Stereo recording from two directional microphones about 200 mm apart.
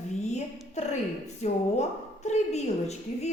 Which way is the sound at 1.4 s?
35° left (ahead or behind).